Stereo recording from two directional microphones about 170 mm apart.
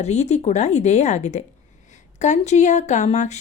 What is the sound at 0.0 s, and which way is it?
Speech, 40° left (ahead or behind).